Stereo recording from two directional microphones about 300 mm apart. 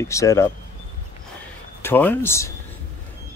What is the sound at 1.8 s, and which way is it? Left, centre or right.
Speech, centre.